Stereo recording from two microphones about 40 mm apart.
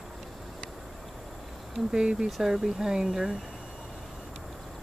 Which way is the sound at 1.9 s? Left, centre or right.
Centre.